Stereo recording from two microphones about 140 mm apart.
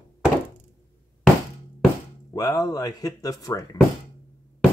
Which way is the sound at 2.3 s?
25° left (ahead or behind).